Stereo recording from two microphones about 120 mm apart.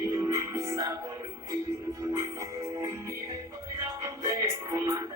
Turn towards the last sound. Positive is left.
turn(degrees=-25)  # may be behind; listen again after turning